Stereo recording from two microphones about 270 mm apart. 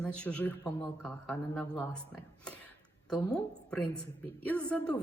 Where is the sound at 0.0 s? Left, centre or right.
Centre.